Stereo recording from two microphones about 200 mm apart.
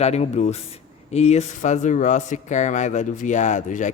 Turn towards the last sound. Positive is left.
turn(degrees=40)  # may be behind; listen again after turning